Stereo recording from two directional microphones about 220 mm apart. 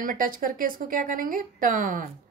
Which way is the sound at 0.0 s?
40° right (ahead or behind).